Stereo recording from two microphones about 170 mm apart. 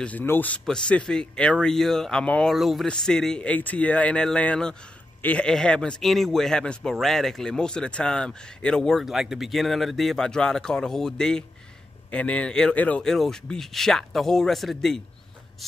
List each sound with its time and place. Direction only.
0.0 s speech: 10° left (ahead or behind)